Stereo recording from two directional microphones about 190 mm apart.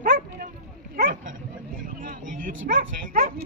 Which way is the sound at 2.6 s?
50° right (ahead or behind).